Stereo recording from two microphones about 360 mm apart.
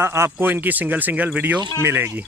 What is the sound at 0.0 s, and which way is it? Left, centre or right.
Speech, centre.